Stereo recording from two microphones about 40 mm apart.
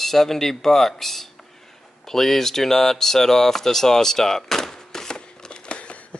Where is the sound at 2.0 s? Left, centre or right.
Centre; by 6.2 s left.